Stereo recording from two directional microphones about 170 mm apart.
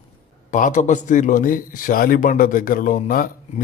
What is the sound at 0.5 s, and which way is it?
Speech, 45° left (ahead or behind).